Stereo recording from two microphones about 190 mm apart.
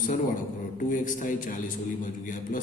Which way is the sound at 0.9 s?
45° left (ahead or behind).